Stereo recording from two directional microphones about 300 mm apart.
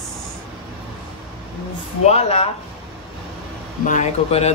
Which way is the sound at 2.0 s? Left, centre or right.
Left.